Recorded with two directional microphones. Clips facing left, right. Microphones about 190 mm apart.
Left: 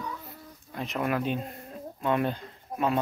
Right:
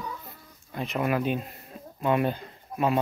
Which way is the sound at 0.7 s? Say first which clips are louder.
Right 2 dB; centre (ahead or behind).